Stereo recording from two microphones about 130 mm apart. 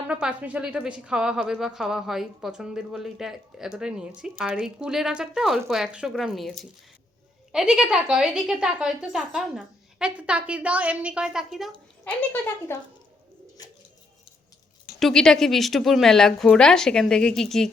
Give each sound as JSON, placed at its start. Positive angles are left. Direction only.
{"t": 0.1, "sound": "speech", "side_deg": -10}
{"t": 12.0, "sound": "speech", "side_deg": 15}
{"t": 14.9, "sound": "speech", "side_deg": 5}